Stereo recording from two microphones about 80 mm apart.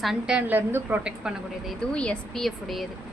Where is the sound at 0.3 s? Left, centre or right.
Right.